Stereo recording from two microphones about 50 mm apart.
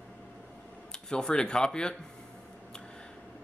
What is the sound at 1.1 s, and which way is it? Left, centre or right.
Speech, centre.